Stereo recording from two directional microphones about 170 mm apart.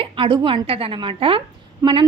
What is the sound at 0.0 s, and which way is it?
A woman's voice, 30° right (ahead or behind).